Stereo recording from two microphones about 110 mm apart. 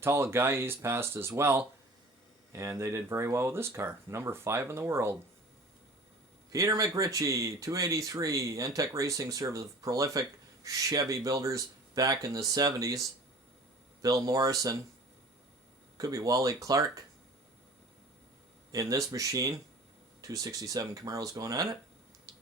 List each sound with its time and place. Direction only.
0.0 s speech: 25° right (ahead or behind)
6.5 s speech: 30° right (ahead or behind)
14.3 s speech: 35° right (ahead or behind)
16.0 s speech: 30° right (ahead or behind)
18.7 s speech: 30° right (ahead or behind)